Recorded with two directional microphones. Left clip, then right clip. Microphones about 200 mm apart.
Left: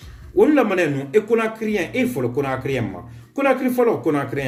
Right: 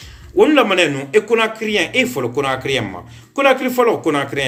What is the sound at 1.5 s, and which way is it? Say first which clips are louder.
Speech: right 6 dB; 40° right (ahead or behind).